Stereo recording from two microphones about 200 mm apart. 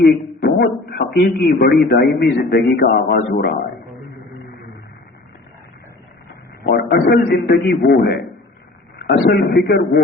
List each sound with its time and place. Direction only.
0.0 s a man's voice: 55° left (ahead or behind)
6.6 s a man's voice: 45° left (ahead or behind)